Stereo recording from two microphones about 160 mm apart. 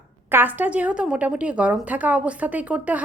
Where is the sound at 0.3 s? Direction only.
10° right (ahead or behind).